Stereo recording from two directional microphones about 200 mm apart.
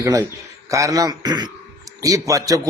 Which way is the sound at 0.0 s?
15° right (ahead or behind).